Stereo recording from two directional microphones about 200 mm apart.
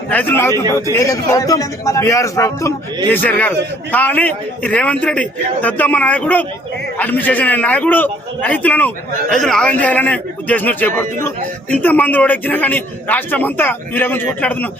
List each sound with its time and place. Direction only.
0.1 s a man's voice: 10° left (ahead or behind)